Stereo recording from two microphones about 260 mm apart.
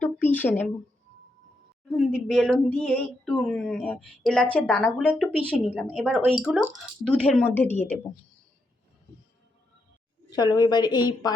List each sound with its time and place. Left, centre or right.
0.0 s a sound: centre
1.9 s speech: centre
10.2 s a woman's voice: centre